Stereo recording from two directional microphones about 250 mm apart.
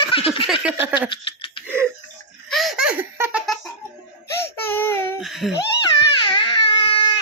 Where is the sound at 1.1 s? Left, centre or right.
Left.